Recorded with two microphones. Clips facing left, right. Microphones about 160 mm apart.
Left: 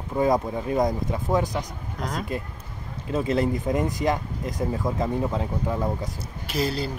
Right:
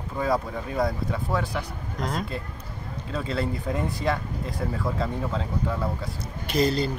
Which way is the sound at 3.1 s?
15° left (ahead or behind).